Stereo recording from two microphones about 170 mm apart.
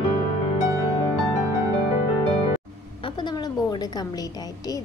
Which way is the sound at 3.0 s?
25° left (ahead or behind).